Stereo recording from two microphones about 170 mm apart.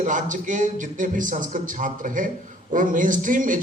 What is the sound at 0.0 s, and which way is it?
A man's voice, 50° right (ahead or behind).